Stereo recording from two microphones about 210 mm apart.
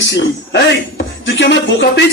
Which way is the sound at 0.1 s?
60° left (ahead or behind).